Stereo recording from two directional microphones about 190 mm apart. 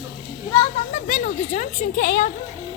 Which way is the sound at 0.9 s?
40° left (ahead or behind).